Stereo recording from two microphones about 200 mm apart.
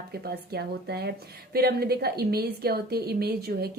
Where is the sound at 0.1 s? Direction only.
50° right (ahead or behind).